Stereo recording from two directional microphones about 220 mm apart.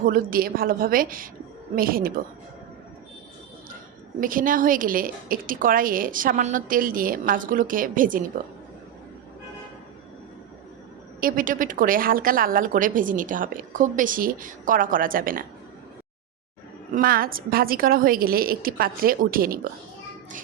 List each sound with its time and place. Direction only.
0.0 s a woman's voice: 40° right (ahead or behind)
4.2 s a woman's voice: 40° right (ahead or behind)
11.2 s a woman's voice: 40° right (ahead or behind)
16.9 s a woman's voice: 40° right (ahead or behind)